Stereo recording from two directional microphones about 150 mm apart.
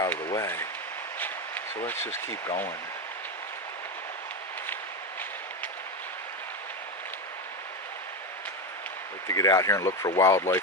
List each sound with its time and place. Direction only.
0.3 s speech: 20° left (ahead or behind)
9.2 s speech: 20° left (ahead or behind)